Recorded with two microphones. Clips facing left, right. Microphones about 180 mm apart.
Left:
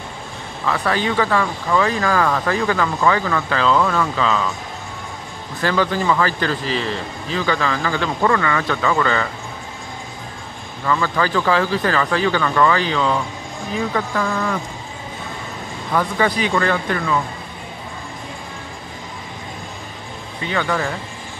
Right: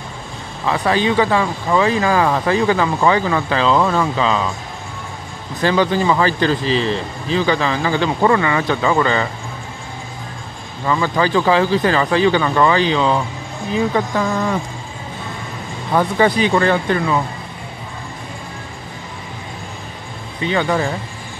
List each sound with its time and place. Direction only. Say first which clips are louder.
0.7 s speech: right 3 dB; 20° right (ahead or behind)
5.6 s speech: right 3 dB; 20° right (ahead or behind)
10.9 s speech: right 3 dB; 20° right (ahead or behind)
15.9 s speech: right 4 dB; 30° right (ahead or behind)
20.5 s speech: right 3 dB; 25° right (ahead or behind)